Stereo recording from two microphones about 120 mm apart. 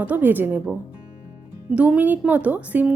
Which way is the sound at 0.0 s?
15° right (ahead or behind).